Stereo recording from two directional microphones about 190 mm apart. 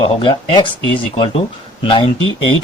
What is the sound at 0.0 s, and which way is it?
Speech, 25° left (ahead or behind).